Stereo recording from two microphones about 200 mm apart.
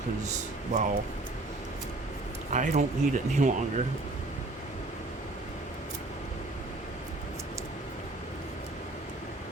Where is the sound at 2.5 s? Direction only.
40° right (ahead or behind).